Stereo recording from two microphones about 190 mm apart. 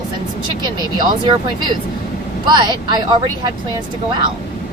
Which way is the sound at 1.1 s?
25° right (ahead or behind).